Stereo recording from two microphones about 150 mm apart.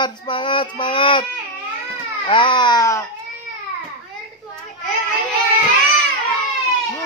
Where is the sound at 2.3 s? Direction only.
35° left (ahead or behind).